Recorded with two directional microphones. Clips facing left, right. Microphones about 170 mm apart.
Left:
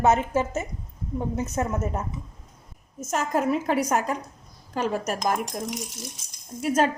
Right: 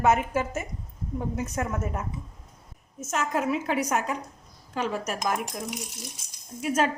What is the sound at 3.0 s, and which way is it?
A woman's voice, 40° left (ahead or behind).